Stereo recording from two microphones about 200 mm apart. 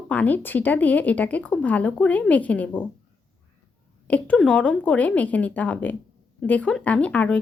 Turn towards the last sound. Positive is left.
turn(degrees=5)  # may be behind; listen again after turning